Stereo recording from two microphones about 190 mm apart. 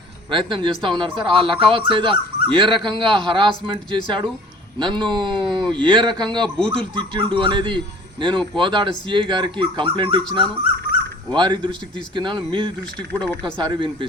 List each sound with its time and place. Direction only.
0.3 s speech: 25° right (ahead or behind)